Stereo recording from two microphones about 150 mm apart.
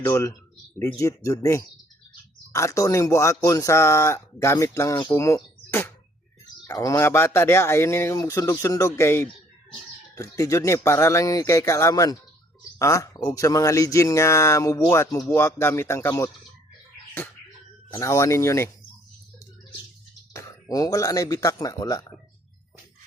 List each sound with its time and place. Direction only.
0.0 s speech: 15° left (ahead or behind)
17.9 s speech: 20° left (ahead or behind)
20.3 s speech: 25° left (ahead or behind)